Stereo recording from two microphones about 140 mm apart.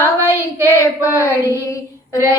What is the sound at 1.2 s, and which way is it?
Child singing, 20° left (ahead or behind).